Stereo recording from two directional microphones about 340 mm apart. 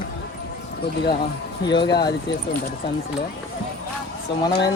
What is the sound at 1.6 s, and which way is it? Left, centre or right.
Speech, centre.